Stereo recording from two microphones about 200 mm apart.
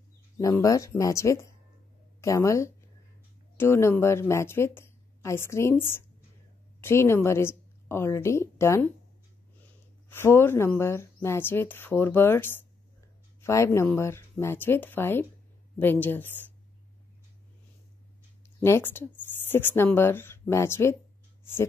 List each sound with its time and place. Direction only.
0.4 s a woman's voice: 15° left (ahead or behind)
18.6 s a woman's voice: 10° left (ahead or behind)